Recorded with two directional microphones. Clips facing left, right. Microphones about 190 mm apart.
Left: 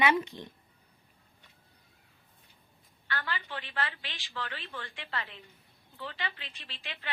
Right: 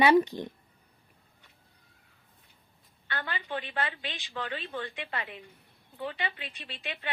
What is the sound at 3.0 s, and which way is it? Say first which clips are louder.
A woman's voice: right 1 dB; 20° right (ahead or behind).